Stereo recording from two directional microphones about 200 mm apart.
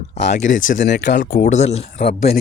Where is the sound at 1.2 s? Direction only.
40° left (ahead or behind).